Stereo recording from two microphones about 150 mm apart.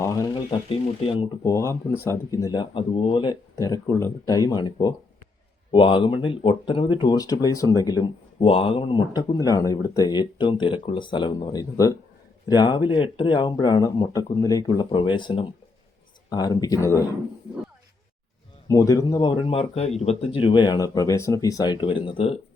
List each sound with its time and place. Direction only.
0.0 s a sound: 20° left (ahead or behind)
0.5 s speech: 40° left (ahead or behind)
1.5 s speech: 20° left (ahead or behind)
18.7 s speech: 20° left (ahead or behind); by 22.4 s 40° left (ahead or behind)